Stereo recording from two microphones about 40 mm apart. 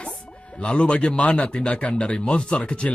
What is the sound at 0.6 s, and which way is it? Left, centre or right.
A woman's voice, left.